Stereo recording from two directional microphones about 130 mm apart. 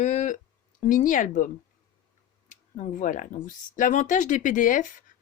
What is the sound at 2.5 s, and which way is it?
Speech, 70° left (ahead or behind).